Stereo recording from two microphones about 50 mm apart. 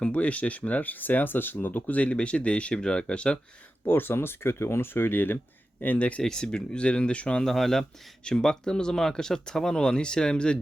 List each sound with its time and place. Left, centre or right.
0.0 s speech: left
3.8 s speech: left
6.2 s speech: centre
7.4 s speech: centre